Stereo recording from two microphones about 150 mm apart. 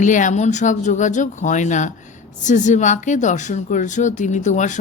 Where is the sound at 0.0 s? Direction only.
55° left (ahead or behind).